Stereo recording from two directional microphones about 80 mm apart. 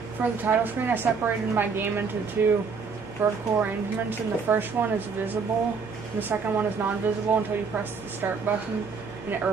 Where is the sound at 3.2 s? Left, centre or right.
Right.